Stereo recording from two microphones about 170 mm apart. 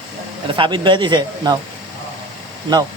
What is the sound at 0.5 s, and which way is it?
Speech, 30° right (ahead or behind).